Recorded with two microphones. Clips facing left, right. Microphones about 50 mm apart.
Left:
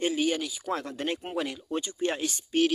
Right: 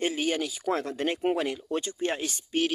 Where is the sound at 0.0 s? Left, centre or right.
Right.